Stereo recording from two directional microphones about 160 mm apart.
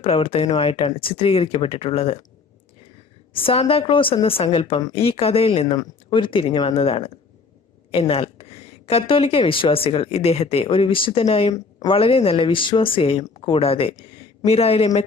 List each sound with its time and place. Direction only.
0.0 s speech: 35° left (ahead or behind)
3.3 s speech: 35° left (ahead or behind)
4.8 s speech: 25° left (ahead or behind)
5.0 s speech: 35° left (ahead or behind)